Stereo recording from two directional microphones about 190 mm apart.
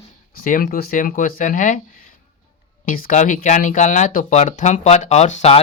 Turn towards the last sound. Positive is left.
turn(degrees=35)  # may be behind; listen again after turning